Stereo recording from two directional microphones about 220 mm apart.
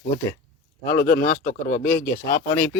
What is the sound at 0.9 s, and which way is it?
Speech, 45° left (ahead or behind).